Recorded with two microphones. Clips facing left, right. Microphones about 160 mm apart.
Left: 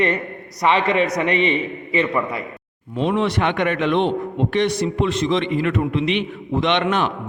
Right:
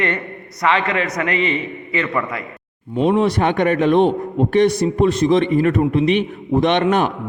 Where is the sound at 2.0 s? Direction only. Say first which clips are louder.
Left 1 dB; 20° left (ahead or behind).